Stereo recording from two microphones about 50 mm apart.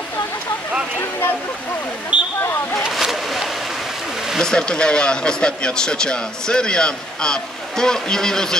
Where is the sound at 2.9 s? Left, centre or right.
Centre.